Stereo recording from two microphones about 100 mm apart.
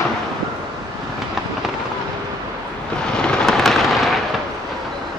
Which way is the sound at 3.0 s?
10° left (ahead or behind).